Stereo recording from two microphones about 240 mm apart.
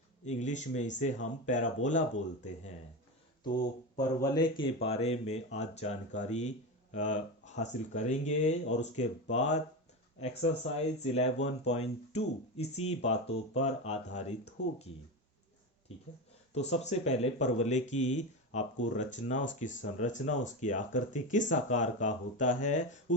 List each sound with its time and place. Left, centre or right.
0.3 s speech: left
3.9 s speech: centre
11.3 s speech: left
11.7 s speech: left
16.6 s speech: left